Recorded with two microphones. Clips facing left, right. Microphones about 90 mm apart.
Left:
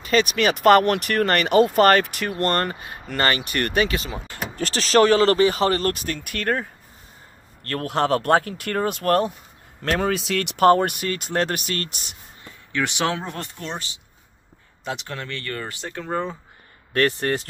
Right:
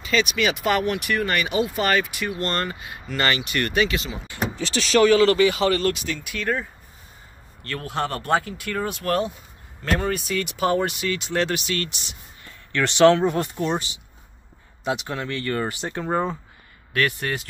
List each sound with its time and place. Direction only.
0.0 s speech: 50° left (ahead or behind)
6.1 s speech: 60° left (ahead or behind)
9.8 s speech: 90° left; by 12.2 s 45° left (ahead or behind)
12.7 s speech: 5° left (ahead or behind)
13.3 s speech: 10° right (ahead or behind)
15.5 s speech: 20° right (ahead or behind)
16.9 s speech: 35° left (ahead or behind)